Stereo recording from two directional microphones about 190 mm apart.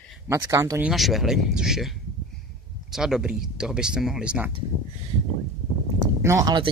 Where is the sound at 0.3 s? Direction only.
15° right (ahead or behind).